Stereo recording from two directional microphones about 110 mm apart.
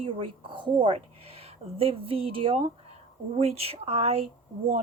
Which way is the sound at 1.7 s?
60° right (ahead or behind).